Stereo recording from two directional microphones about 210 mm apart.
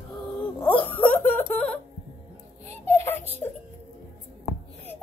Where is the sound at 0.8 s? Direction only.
10° left (ahead or behind).